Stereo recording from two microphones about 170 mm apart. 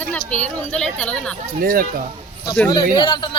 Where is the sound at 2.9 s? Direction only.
25° left (ahead or behind).